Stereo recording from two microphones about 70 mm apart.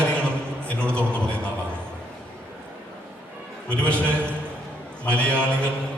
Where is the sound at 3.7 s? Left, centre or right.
Centre.